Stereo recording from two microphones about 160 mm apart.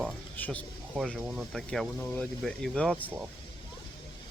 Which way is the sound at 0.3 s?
10° left (ahead or behind).